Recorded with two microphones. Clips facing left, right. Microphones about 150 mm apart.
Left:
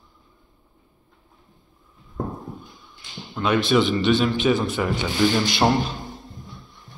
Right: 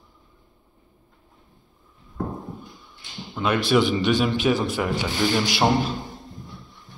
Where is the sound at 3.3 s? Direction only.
10° right (ahead or behind).